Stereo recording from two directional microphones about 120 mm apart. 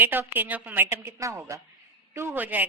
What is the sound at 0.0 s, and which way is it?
A woman's voice, 15° right (ahead or behind).